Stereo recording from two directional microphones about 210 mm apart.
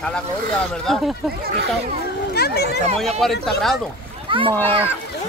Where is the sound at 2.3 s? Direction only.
50° left (ahead or behind).